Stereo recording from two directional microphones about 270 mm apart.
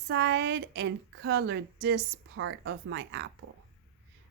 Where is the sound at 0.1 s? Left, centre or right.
Right.